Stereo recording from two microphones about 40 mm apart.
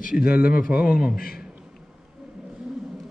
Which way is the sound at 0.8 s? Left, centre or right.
Right.